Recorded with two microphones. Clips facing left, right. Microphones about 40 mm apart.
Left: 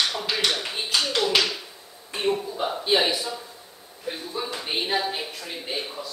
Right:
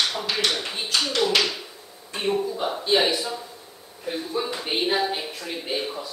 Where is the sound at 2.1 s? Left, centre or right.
Centre.